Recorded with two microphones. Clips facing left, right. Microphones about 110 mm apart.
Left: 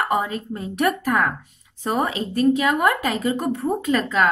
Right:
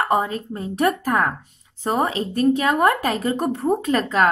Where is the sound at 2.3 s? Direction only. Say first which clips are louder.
Left 1 dB; 40° right (ahead or behind).